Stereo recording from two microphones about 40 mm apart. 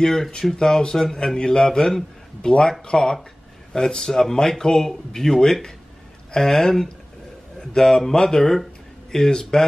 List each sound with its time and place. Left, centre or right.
0.0 s a man's voice: centre